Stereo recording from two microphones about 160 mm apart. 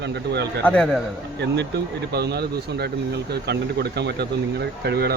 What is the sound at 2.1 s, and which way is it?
Speech, 90° right.